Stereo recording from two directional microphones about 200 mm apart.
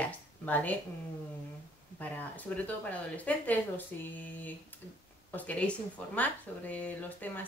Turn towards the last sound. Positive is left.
turn(degrees=10)  # may be behind; listen again after turning